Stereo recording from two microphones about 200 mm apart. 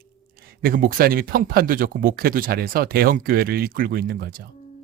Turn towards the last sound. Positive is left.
turn(degrees=-50)  # may be behind; listen again after turning